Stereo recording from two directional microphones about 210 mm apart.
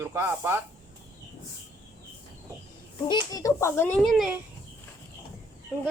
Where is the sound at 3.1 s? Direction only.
20° left (ahead or behind); by 4.3 s centre (ahead or behind).